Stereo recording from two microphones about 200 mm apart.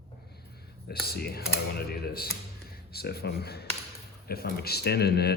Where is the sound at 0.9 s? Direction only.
50° left (ahead or behind).